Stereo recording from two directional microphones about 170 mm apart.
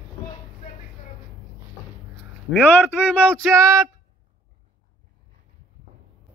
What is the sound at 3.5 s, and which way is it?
Speech, 15° right (ahead or behind).